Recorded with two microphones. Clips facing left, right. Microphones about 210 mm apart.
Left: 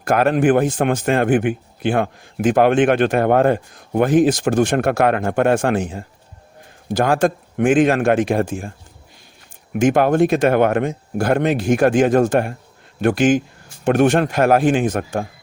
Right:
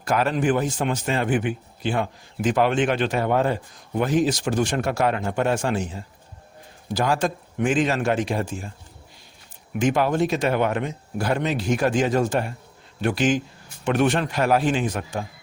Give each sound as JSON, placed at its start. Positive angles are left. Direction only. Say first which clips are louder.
{"t": 0.0, "sound": "a man's voice", "louder": "left 6 dB", "side_deg": 55}
{"t": 9.7, "sound": "speech", "louder": "left 6 dB", "side_deg": 50}